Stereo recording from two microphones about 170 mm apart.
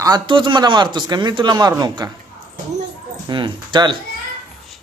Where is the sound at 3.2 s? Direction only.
30° right (ahead or behind).